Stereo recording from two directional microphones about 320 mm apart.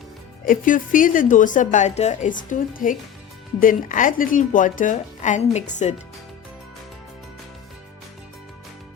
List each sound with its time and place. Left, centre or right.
0.4 s a woman's voice: left